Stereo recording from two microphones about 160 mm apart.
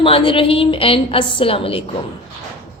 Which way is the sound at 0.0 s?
35° left (ahead or behind).